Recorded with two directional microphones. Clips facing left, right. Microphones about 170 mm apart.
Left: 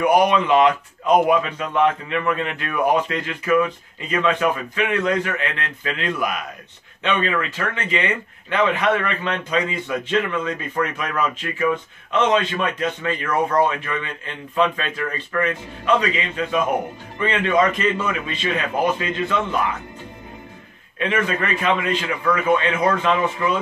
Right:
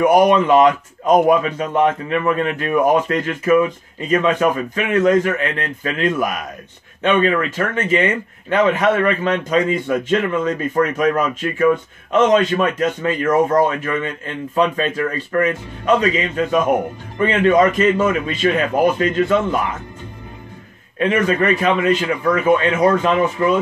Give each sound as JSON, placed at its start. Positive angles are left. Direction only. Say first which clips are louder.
{"t": 0.0, "sound": "a man's voice", "louder": "right 4 dB", "side_deg": -45}
{"t": 21.0, "sound": "a man's voice", "louder": "right 6 dB", "side_deg": -40}